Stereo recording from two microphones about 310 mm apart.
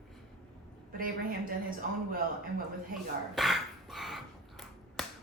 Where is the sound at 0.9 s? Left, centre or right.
Right.